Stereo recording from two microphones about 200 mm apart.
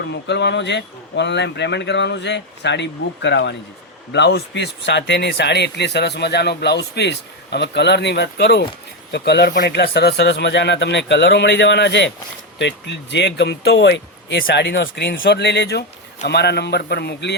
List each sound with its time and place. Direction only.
0.0 s speech: 60° left (ahead or behind)